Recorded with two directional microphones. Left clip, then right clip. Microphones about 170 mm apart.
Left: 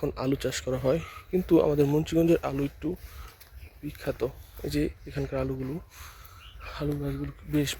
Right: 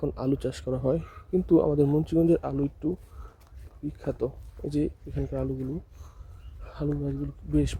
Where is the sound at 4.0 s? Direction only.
30° right (ahead or behind).